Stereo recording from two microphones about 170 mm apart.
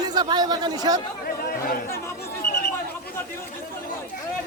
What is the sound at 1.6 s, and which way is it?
Speech, 60° left (ahead or behind).